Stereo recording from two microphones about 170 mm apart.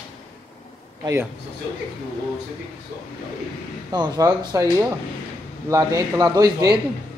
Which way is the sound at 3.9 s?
25° right (ahead or behind).